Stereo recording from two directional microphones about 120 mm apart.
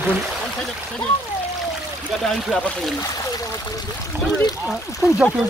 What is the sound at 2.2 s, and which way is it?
Speech, 5° left (ahead or behind).